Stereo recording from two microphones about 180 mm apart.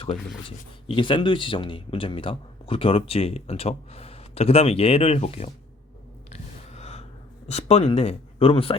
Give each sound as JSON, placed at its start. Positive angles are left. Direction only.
{"t": 0.9, "sound": "speech", "side_deg": 30}
{"t": 6.3, "sound": "a sound", "side_deg": 35}
{"t": 7.4, "sound": "speech", "side_deg": 35}